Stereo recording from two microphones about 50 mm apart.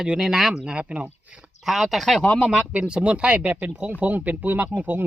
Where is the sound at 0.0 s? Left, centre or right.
Centre.